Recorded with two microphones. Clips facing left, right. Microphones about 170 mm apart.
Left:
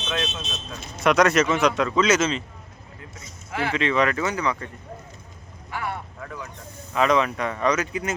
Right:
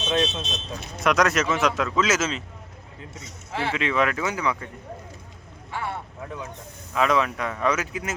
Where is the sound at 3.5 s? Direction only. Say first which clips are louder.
Left 1 dB; 30° right (ahead or behind).